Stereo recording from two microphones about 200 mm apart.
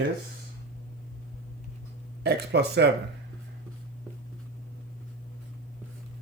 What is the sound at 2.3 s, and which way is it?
Speech, 55° right (ahead or behind).